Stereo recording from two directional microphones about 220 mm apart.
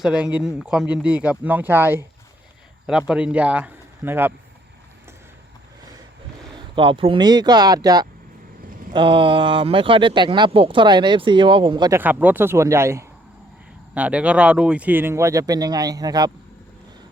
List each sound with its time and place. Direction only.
0.0 s speech: 5° right (ahead or behind)
3.1 s speech: 5° right (ahead or behind)
6.6 s speech: 25° right (ahead or behind)